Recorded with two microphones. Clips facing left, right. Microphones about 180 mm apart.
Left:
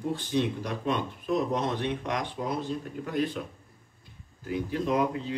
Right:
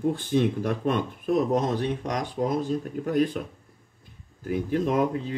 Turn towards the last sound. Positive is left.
turn(degrees=-50)  # may be behind; listen again after turning